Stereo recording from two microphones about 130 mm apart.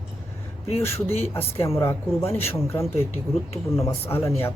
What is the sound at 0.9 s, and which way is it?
A man's voice, 20° left (ahead or behind).